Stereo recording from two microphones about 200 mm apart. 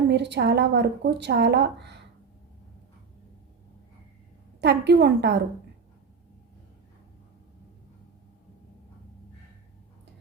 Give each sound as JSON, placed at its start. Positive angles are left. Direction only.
{"t": 0.1, "sound": "a woman's voice", "side_deg": -60}
{"t": 4.6, "sound": "a woman's voice", "side_deg": -60}